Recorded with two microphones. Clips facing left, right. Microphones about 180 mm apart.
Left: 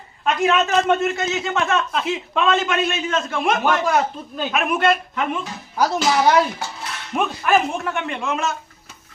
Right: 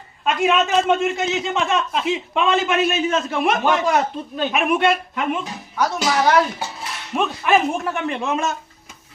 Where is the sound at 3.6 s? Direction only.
5° left (ahead or behind).